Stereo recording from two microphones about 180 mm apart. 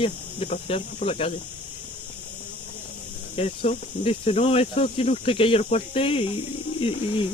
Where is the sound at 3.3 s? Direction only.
35° left (ahead or behind).